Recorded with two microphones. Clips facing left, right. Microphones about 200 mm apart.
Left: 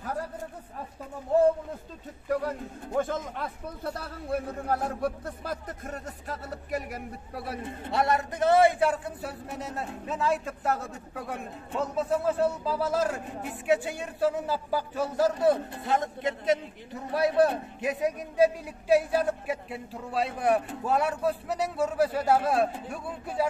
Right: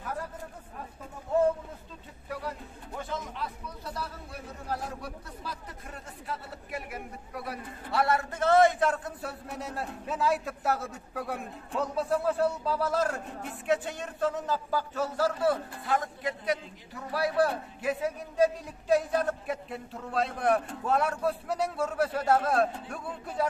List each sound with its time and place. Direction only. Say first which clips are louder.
2.2 s a man's voice: left 8 dB; 45° left (ahead or behind); by 23.5 s 5° left (ahead or behind)